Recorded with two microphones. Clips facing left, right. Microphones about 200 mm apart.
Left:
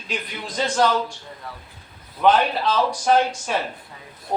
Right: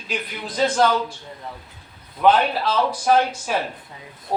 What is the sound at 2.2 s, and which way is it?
Speech, 5° right (ahead or behind).